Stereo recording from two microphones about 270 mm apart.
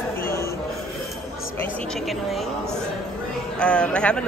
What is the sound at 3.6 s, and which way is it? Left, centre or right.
Speech, centre.